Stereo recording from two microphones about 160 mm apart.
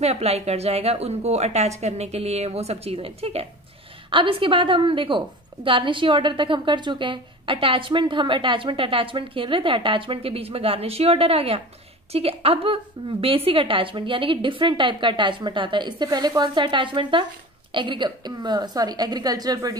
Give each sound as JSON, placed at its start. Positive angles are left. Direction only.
{"t": 0.0, "sound": "a woman's voice", "side_deg": -40}